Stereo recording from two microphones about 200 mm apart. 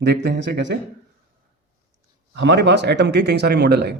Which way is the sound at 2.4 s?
60° right (ahead or behind).